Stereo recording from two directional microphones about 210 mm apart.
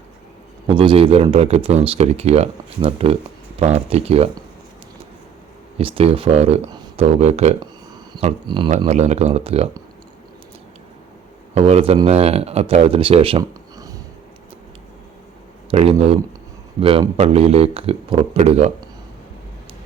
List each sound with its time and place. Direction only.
0.7 s speech: 25° right (ahead or behind)
5.7 s speech: 25° right (ahead or behind)
11.5 s speech: 30° right (ahead or behind)
15.7 s speech: 30° right (ahead or behind)